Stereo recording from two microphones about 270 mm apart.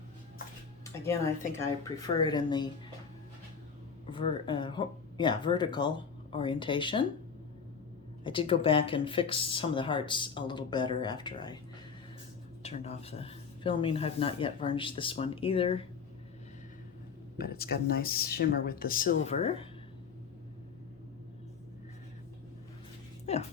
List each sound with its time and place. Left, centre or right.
0.9 s speech: centre
4.0 s speech: centre
8.2 s speech: centre
12.6 s speech: left
17.3 s speech: left
23.2 s a sound: left